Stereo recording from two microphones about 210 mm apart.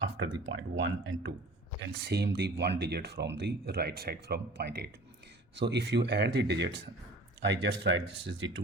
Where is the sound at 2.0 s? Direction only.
50° right (ahead or behind).